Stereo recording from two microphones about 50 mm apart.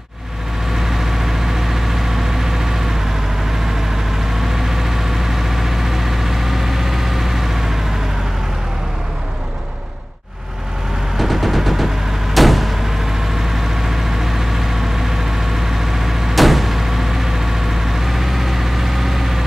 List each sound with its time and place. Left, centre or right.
0.7 s vehicle: centre
4.3 s vehicle: centre
11.1 s a sound: centre
12.4 s vehicle: centre